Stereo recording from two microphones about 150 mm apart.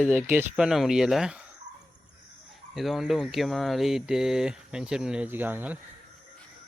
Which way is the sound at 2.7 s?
Centre (ahead or behind).